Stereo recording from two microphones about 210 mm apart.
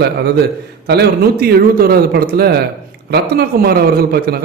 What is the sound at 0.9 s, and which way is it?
A man's voice, 50° right (ahead or behind).